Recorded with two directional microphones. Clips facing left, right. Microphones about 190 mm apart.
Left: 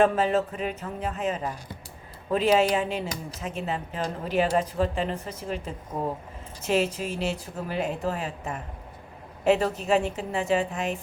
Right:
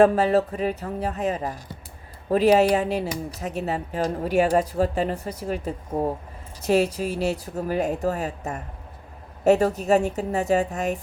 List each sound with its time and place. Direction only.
0.0 s a woman's voice: 40° right (ahead or behind)